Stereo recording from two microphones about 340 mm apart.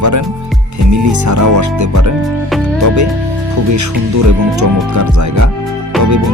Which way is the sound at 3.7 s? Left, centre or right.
Right.